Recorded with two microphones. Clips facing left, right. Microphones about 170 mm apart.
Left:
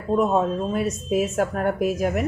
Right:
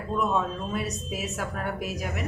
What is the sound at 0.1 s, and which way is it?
Speech, 40° left (ahead or behind).